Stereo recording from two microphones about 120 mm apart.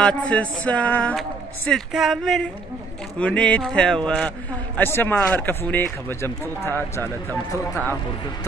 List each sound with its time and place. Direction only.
0.0 s speech: 10° left (ahead or behind)
1.7 s speech: centre (ahead or behind); by 6.7 s 20° left (ahead or behind)